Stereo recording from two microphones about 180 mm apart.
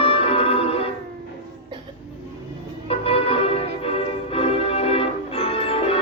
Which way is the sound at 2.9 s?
30° left (ahead or behind).